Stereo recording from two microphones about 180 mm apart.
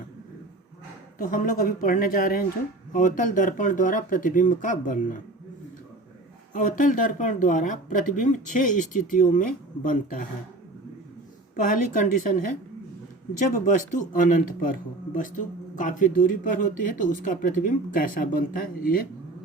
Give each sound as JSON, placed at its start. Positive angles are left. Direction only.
{"t": 1.2, "sound": "speech", "side_deg": 50}
{"t": 6.5, "sound": "speech", "side_deg": 45}
{"t": 11.5, "sound": "speech", "side_deg": 45}